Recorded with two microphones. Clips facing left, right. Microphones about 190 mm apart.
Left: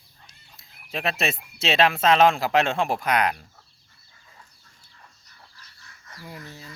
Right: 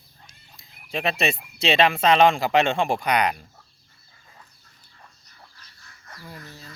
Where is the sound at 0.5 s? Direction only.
Centre (ahead or behind).